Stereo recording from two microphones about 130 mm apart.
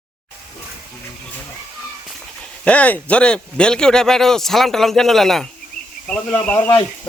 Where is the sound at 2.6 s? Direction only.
10° left (ahead or behind).